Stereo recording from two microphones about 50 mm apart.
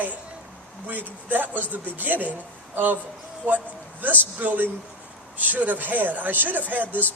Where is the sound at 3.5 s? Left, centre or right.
Right.